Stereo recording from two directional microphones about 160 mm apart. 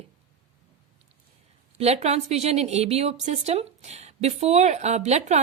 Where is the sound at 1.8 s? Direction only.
45° right (ahead or behind).